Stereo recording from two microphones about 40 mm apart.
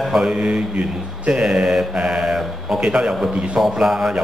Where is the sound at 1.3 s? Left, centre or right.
Centre.